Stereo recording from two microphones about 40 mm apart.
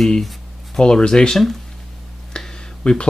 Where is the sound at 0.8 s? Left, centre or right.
Centre.